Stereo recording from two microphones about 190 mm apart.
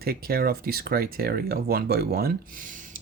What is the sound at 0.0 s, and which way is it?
Speech, 50° right (ahead or behind).